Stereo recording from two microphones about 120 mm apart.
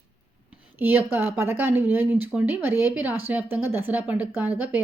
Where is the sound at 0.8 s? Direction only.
15° right (ahead or behind).